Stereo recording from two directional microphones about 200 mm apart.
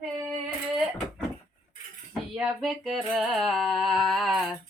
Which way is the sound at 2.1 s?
Centre (ahead or behind).